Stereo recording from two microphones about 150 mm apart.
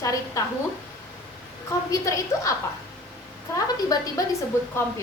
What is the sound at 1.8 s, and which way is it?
Speech, 20° left (ahead or behind).